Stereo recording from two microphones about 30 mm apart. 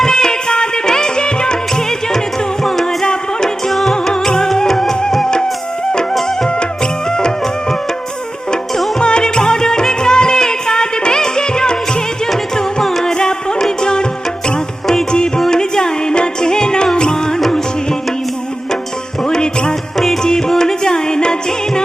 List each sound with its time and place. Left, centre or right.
0.0 s music: left
3.7 s music: centre
7.1 s music: left
9.0 s music: left
12.8 s music: centre
13.1 s music: left
19.2 s music: left
20.5 s music: centre